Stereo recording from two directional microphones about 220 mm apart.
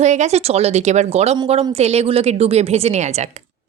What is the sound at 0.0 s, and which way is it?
A woman's voice, 30° right (ahead or behind).